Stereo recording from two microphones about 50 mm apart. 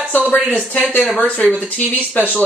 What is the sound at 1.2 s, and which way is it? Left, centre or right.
Speech, left.